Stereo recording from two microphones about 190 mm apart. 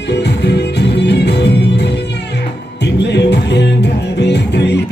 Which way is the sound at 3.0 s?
65° left (ahead or behind).